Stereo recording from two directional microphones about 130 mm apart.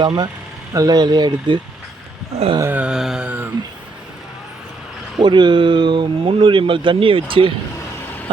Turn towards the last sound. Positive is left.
turn(degrees=-45)  # may be behind; listen again after turning